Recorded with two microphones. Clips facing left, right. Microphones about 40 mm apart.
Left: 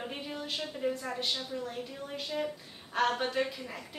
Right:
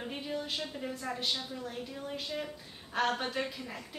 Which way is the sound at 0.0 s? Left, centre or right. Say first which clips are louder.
Right 1 dB; centre.